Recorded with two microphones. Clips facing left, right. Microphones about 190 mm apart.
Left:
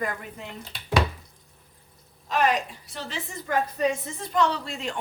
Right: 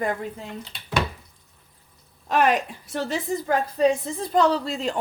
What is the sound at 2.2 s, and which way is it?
Speech, 55° right (ahead or behind).